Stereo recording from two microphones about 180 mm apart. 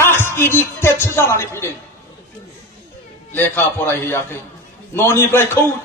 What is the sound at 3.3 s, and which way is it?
A man's voice, 10° left (ahead or behind).